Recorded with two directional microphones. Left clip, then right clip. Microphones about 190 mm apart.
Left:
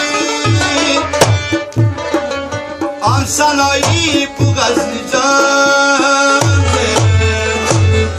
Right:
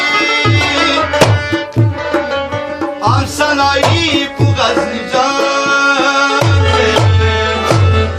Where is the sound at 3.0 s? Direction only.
60° left (ahead or behind).